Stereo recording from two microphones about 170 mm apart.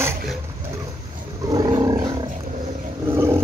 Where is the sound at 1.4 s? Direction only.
25° right (ahead or behind).